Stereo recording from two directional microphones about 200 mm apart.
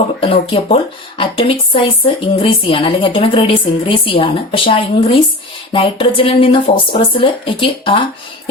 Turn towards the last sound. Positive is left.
turn(degrees=25)  # may be behind; listen again after turning